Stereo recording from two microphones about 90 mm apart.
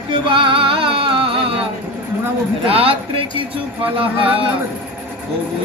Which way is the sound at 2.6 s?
90° right.